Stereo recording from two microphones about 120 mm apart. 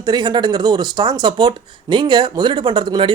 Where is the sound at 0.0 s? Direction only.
35° right (ahead or behind).